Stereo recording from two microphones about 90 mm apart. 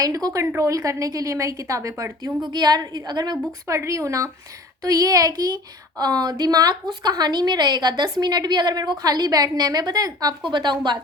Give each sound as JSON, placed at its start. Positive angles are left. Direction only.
{"t": 0.0, "sound": "a woman's voice", "side_deg": -40}
{"t": 2.2, "sound": "a woman's voice", "side_deg": -50}
{"t": 3.7, "sound": "a woman's voice", "side_deg": -35}
{"t": 10.4, "sound": "a woman's voice", "side_deg": -60}